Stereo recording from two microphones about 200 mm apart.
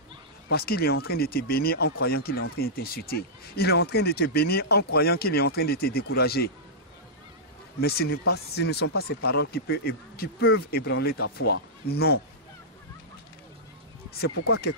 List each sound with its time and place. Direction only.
0.5 s speech: 50° left (ahead or behind)
7.8 s speech: 50° left (ahead or behind)